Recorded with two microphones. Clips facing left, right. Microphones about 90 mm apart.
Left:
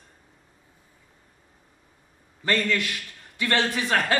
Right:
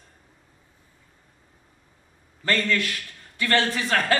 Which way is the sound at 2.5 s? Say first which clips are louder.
Even; 15° left (ahead or behind).